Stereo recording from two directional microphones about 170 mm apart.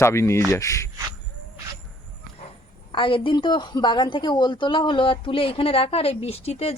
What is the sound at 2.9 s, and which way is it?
A woman's voice, 30° left (ahead or behind).